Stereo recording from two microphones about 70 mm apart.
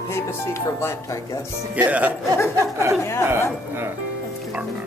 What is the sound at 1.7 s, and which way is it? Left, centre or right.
Speech, right.